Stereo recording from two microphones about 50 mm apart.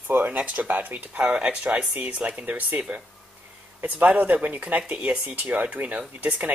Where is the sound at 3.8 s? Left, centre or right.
Right.